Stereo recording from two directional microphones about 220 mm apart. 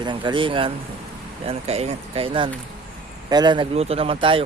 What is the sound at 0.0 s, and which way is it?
Speech, 20° right (ahead or behind).